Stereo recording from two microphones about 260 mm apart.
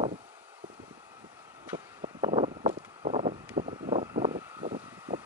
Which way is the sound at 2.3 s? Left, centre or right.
Right.